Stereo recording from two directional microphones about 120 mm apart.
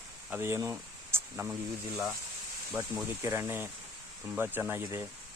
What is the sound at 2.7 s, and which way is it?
Speech, 20° right (ahead or behind).